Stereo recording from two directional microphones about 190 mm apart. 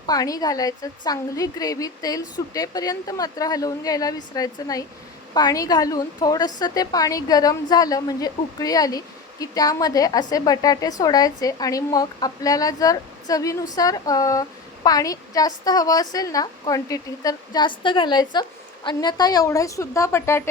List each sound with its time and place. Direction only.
0.0 s a woman's voice: 20° left (ahead or behind)